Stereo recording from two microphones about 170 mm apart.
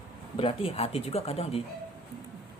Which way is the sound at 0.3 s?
35° left (ahead or behind).